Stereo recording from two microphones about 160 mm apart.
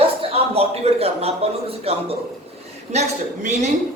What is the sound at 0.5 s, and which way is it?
A man's voice, 40° right (ahead or behind).